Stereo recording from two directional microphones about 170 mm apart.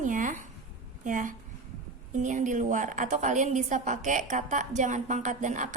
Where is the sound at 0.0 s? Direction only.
50° right (ahead or behind).